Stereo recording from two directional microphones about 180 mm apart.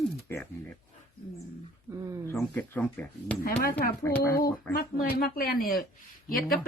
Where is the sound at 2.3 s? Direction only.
10° left (ahead or behind).